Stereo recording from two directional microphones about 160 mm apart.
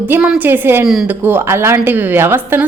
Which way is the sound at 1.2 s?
15° right (ahead or behind).